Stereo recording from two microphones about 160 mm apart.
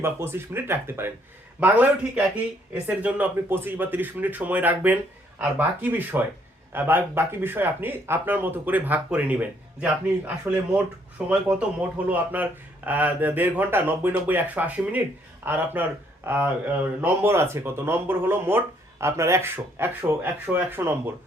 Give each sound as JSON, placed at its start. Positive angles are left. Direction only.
{"t": 0.0, "sound": "speech", "side_deg": -15}